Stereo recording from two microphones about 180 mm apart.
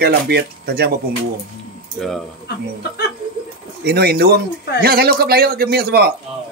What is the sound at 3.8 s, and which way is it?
A man's voice, 60° right (ahead or behind).